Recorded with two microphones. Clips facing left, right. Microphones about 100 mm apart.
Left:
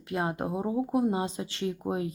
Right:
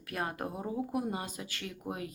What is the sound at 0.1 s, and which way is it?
Speech, 20° left (ahead or behind).